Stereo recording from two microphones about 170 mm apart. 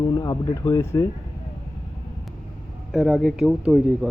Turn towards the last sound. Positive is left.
turn(degrees=0)  # may be behind; listen again after turning